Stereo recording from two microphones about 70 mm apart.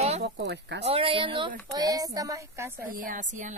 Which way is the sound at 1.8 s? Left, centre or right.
Right.